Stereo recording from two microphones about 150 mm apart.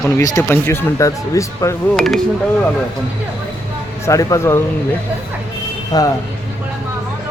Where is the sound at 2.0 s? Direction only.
5° left (ahead or behind).